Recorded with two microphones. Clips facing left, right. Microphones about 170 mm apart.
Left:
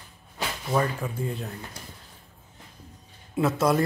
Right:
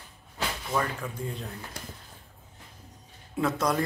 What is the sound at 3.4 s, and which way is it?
Speech, 5° left (ahead or behind).